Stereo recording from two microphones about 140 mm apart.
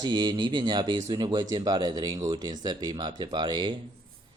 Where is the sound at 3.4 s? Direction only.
35° right (ahead or behind).